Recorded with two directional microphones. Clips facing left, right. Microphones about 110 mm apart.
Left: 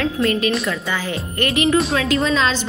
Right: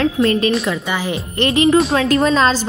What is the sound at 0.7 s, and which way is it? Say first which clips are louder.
A woman's voice: right 3 dB; 20° right (ahead or behind).